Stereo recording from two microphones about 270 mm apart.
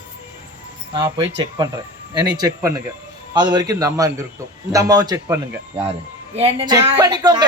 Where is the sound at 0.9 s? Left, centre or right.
Centre.